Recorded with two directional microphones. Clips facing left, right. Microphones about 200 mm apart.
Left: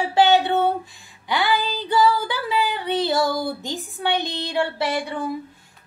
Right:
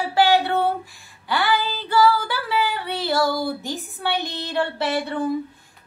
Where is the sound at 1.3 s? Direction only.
15° left (ahead or behind).